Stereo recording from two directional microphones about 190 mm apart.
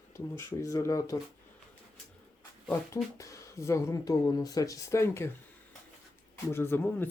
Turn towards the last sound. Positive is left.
turn(degrees=10)  # may be behind; listen again after turning